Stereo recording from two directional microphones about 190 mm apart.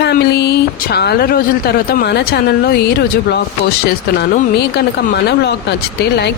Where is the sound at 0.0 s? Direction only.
60° left (ahead or behind).